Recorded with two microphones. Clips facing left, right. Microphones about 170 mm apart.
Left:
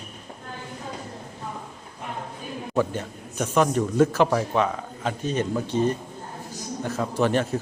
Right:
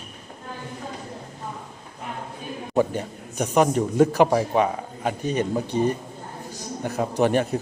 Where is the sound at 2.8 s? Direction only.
15° right (ahead or behind).